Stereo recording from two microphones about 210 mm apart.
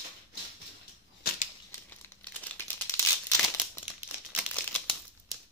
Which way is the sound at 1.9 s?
10° left (ahead or behind).